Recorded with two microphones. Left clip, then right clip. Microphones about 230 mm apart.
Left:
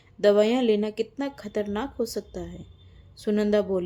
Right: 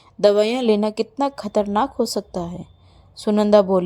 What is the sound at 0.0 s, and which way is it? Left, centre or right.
A woman's voice, right.